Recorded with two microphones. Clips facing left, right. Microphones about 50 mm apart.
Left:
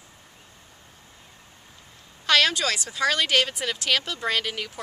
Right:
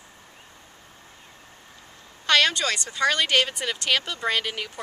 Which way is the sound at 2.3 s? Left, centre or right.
Centre.